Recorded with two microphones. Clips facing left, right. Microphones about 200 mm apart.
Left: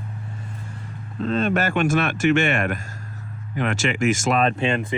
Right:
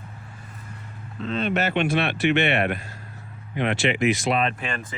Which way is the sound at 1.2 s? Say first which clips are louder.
Left 3 dB; 45° left (ahead or behind).